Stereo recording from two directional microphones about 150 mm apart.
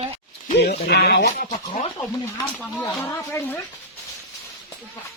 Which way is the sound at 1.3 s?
60° left (ahead or behind).